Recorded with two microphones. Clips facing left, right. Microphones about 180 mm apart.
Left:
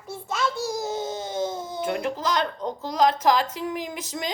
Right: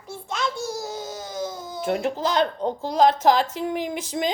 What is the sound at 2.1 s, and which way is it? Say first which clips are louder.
Speech: right 3 dB; 30° right (ahead or behind).